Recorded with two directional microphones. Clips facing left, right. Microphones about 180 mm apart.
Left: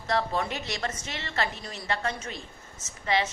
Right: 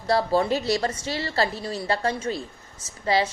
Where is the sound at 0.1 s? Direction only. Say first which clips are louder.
Right 7 dB; 35° right (ahead or behind).